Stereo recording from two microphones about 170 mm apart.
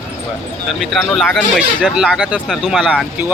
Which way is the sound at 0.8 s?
Centre (ahead or behind).